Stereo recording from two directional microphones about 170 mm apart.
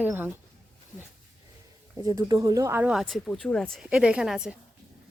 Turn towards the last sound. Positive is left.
turn(degrees=-5)  # may be behind; listen again after turning